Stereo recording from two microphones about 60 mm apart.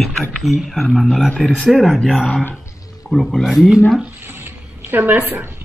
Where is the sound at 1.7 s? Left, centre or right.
Centre.